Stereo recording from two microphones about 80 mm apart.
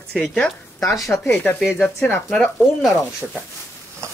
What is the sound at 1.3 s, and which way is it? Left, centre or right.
Speech, left.